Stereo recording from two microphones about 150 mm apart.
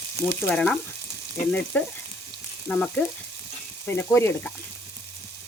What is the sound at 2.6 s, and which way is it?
Speech, 15° left (ahead or behind).